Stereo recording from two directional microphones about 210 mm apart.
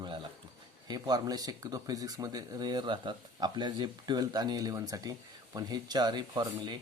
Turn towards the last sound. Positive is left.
turn(degrees=-20)  # may be behind; listen again after turning